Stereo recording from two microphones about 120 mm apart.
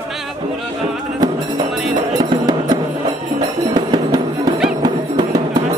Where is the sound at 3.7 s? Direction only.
35° right (ahead or behind).